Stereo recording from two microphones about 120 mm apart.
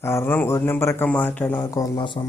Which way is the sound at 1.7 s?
30° left (ahead or behind).